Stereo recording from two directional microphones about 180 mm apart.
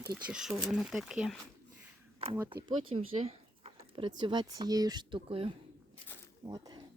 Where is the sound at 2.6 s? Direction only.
30° right (ahead or behind).